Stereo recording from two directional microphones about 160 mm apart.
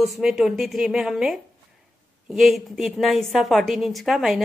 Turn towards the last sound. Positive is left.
turn(degrees=0)  # may be behind; listen again after turning